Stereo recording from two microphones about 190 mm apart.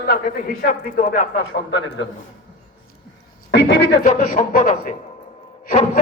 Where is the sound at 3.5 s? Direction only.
65° left (ahead or behind).